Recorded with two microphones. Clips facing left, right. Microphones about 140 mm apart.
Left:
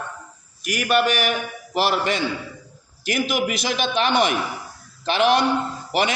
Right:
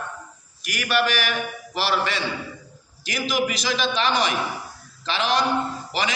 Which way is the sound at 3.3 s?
55° left (ahead or behind).